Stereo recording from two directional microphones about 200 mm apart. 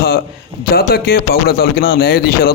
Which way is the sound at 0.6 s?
50° left (ahead or behind).